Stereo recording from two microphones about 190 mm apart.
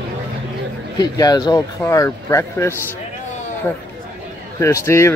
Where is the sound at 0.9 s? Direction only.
20° left (ahead or behind).